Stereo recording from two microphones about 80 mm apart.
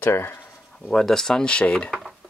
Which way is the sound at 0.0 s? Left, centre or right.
Left.